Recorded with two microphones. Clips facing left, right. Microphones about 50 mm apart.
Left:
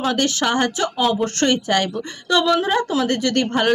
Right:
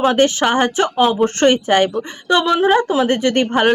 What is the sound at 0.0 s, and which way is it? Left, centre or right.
A woman's voice, right.